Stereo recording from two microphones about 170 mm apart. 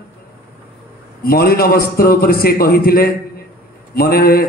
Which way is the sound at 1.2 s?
60° left (ahead or behind).